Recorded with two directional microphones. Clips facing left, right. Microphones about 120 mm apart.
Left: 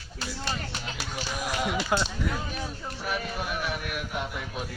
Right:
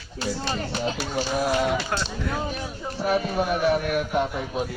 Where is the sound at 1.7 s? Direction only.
5° left (ahead or behind).